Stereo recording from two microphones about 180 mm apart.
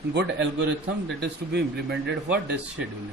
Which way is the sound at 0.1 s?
70° right (ahead or behind).